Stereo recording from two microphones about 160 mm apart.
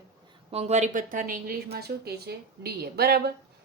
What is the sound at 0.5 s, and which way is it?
A woman's voice, 45° right (ahead or behind).